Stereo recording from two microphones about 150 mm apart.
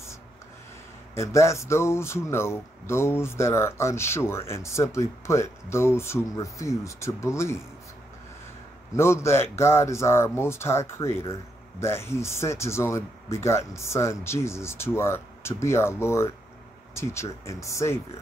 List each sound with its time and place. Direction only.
1.1 s speech: 20° left (ahead or behind)
8.9 s speech: 15° left (ahead or behind)